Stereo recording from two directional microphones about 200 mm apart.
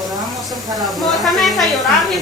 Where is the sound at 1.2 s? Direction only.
Centre (ahead or behind).